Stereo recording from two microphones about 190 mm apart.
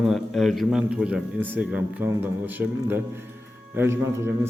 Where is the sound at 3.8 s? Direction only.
15° right (ahead or behind).